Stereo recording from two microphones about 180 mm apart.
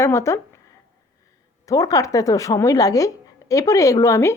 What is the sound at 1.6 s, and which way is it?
Speech, 20° left (ahead or behind).